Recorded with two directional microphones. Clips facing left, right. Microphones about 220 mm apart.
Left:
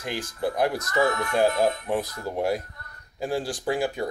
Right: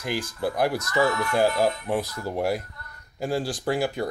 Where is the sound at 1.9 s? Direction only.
10° right (ahead or behind).